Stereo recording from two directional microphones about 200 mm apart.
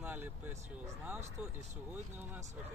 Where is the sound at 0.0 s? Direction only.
10° right (ahead or behind).